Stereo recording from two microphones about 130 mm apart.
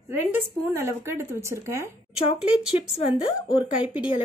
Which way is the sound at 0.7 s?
20° right (ahead or behind).